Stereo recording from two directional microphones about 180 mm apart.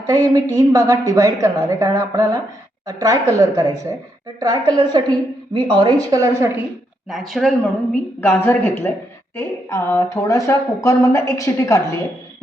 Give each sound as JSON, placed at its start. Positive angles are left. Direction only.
{"t": 0.0, "sound": "a woman's voice", "side_deg": -20}
{"t": 7.1, "sound": "speech", "side_deg": 0}
{"t": 8.2, "sound": "speech", "side_deg": 10}